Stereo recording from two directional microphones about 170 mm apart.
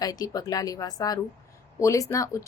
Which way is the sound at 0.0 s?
20° left (ahead or behind).